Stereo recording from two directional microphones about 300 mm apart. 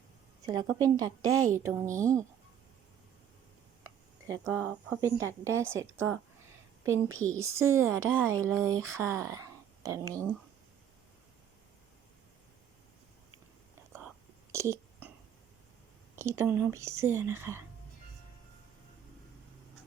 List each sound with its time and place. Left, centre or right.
0.4 s a woman's voice: centre
4.3 s a woman's voice: centre
7.1 s speech: right
7.7 s a woman's voice: centre
14.5 s whispering: centre
16.1 s a woman's voice: centre